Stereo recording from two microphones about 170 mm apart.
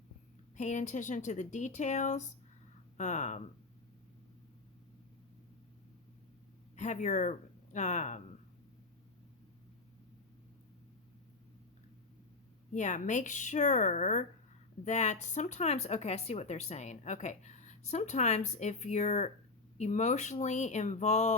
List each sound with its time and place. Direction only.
0.5 s speech: 45° left (ahead or behind)
6.7 s speech: 45° left (ahead or behind)
12.7 s speech: 45° left (ahead or behind)